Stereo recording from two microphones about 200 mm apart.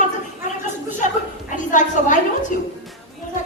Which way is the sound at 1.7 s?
40° left (ahead or behind).